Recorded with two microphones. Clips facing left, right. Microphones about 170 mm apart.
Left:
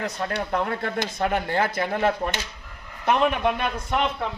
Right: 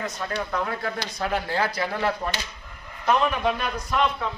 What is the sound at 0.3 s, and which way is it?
Speech, 60° left (ahead or behind).